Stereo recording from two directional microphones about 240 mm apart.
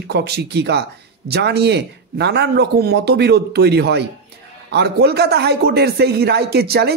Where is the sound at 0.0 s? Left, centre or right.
Right.